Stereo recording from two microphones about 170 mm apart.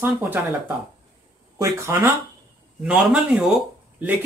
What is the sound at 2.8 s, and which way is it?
Speech, 5° right (ahead or behind).